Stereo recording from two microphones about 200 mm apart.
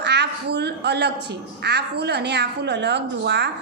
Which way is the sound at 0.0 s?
60° right (ahead or behind).